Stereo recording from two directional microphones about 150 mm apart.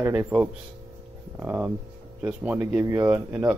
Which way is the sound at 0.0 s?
15° right (ahead or behind).